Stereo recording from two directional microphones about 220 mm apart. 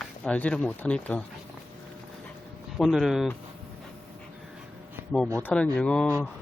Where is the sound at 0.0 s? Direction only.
5° left (ahead or behind).